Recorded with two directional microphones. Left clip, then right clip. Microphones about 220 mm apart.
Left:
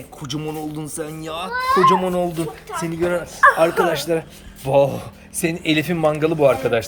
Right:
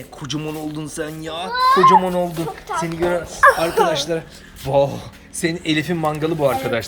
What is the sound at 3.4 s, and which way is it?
Speech, 45° right (ahead or behind).